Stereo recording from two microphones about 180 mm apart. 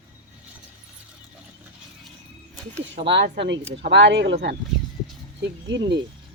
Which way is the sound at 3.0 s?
75° right (ahead or behind).